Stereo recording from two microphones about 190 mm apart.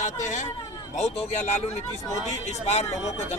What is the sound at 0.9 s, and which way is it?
Speech, 35° left (ahead or behind).